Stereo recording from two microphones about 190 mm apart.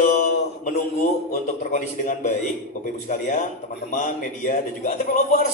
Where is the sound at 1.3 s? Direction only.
45° left (ahead or behind).